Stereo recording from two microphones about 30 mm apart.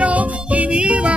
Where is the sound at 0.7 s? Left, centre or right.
Right.